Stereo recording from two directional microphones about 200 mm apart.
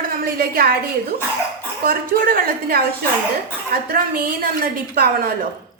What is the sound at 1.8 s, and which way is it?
A woman's voice, 45° right (ahead or behind).